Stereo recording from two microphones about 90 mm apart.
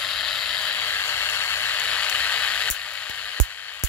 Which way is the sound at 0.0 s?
5° left (ahead or behind).